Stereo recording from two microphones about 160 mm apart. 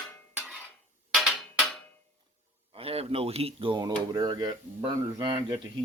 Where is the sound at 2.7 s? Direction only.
40° right (ahead or behind).